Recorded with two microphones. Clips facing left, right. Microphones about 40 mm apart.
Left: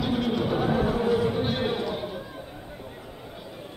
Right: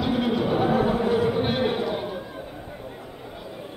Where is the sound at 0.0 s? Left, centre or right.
Centre.